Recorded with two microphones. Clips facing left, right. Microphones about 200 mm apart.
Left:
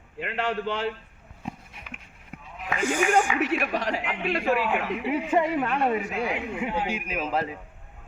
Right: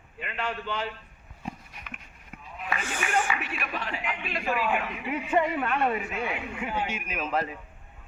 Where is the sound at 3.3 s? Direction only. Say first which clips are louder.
Left 9 dB; 85° left; by 4.9 s 70° left (ahead or behind).